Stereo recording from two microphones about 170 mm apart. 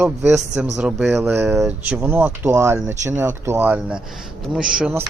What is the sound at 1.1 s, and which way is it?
A man's voice, 15° right (ahead or behind).